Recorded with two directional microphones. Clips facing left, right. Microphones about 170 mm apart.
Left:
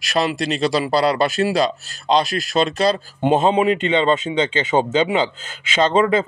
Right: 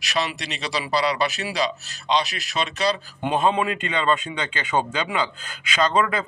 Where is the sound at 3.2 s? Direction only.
25° left (ahead or behind).